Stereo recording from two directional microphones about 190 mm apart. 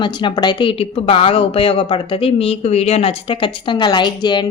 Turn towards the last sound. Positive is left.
turn(degrees=25)  # may be behind; listen again after turning